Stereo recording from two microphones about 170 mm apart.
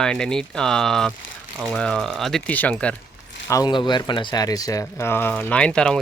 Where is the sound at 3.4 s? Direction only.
20° left (ahead or behind); by 6.0 s 5° left (ahead or behind).